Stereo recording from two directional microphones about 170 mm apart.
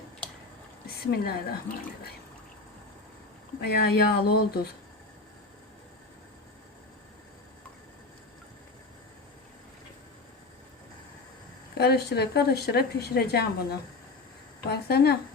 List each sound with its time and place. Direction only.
0.9 s speech: 65° left (ahead or behind)
3.7 s a sound: 65° left (ahead or behind)
11.8 s speech: 70° left (ahead or behind)